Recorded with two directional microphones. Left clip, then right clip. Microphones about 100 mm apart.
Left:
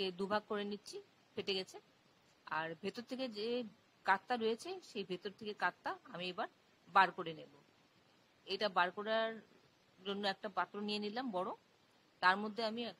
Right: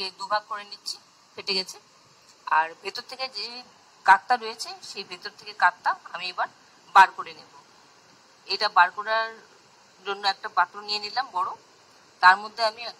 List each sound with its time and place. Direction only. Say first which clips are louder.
0.0 s a woman's voice: right 10 dB; 35° left (ahead or behind)
8.5 s a woman's voice: right 15 dB; 30° left (ahead or behind)